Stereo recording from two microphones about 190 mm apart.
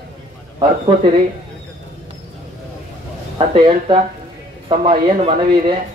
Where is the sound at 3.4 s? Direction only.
30° right (ahead or behind).